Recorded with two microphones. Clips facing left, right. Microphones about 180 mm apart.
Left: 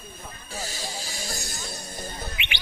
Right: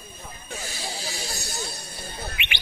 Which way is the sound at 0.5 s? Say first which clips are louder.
Even; 40° left (ahead or behind).